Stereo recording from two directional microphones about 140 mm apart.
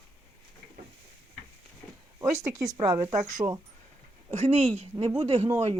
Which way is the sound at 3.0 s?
60° right (ahead or behind).